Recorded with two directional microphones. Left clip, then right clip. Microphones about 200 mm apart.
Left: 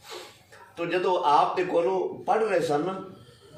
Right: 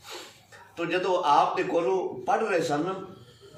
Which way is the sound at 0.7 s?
Centre (ahead or behind).